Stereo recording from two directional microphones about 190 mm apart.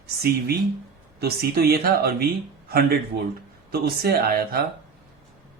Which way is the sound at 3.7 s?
55° right (ahead or behind).